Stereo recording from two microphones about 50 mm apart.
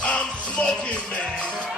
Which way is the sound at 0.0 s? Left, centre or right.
Centre.